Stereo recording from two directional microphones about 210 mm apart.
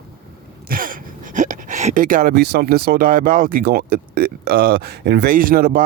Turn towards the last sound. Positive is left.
turn(degrees=-40)  # may be behind; listen again after turning